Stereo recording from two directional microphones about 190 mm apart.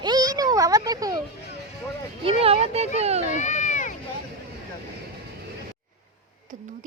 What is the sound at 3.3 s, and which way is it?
Run, 40° left (ahead or behind).